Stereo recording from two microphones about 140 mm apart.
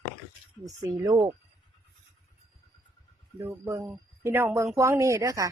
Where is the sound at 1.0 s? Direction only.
25° right (ahead or behind).